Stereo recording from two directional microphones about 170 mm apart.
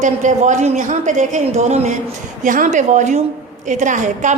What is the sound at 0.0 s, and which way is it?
A woman's voice, 45° right (ahead or behind).